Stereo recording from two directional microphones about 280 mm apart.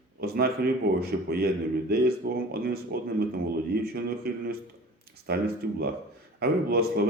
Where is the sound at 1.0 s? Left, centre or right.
Right.